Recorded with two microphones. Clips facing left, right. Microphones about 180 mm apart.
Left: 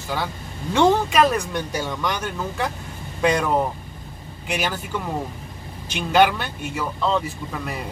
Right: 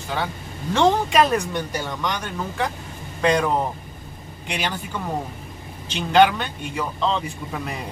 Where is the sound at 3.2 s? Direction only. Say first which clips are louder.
Right 1 dB; 5° left (ahead or behind).